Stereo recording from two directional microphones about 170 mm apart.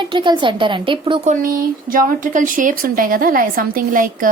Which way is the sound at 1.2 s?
50° right (ahead or behind).